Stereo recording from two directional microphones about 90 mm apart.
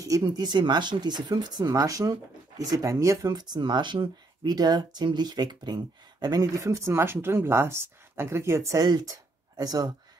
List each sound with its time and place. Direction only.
0.0 s speech: 45° right (ahead or behind)
8.8 s speech: 50° right (ahead or behind)